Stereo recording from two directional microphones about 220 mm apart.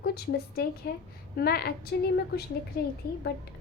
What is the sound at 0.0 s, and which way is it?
A woman's voice, 45° left (ahead or behind).